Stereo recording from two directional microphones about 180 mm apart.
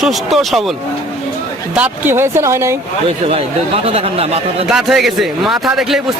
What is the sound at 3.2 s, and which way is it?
Speech, 35° right (ahead or behind).